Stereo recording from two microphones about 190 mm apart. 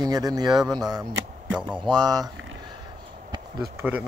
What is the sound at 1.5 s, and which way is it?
Speech, 5° right (ahead or behind).